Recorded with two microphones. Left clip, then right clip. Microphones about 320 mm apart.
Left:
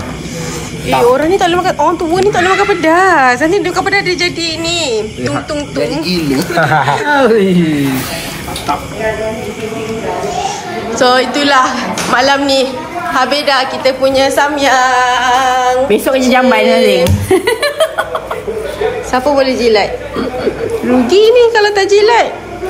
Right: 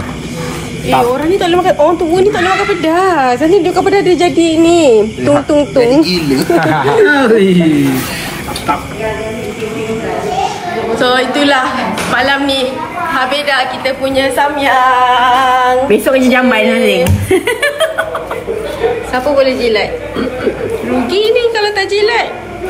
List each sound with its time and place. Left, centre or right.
1.1 s a woman's voice: centre
1.6 s speech: left
2.3 s a woman's voice: centre
3.7 s a woman's voice: centre
4.1 s speech: centre
5.8 s a woman's voice: centre
6.3 s speech: left
11.0 s a woman's voice: centre
16.1 s speech: centre
17.3 s a sound: left
19.1 s a woman's voice: centre